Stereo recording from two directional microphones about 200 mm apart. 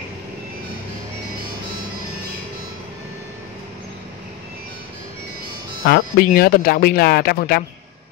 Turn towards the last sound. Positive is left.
turn(degrees=50)  # may be behind; listen again after turning